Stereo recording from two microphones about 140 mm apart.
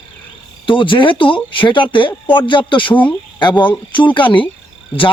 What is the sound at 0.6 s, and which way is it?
Speech, 35° left (ahead or behind).